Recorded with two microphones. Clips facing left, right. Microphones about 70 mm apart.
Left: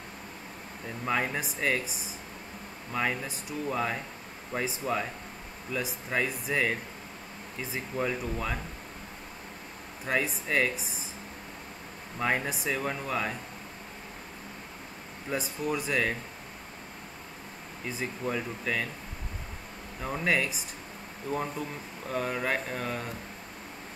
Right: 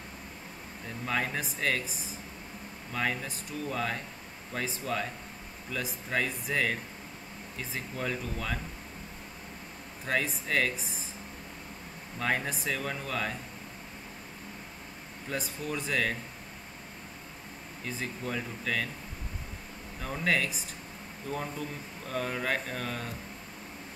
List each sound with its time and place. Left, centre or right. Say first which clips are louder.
1.0 s speech: left 2 dB; centre
10.0 s speech: left 1 dB; centre
12.2 s speech: left 2 dB; centre
15.3 s speech: left 4 dB; centre
17.8 s speech: left 3 dB; centre
20.0 s speech: left 1 dB; centre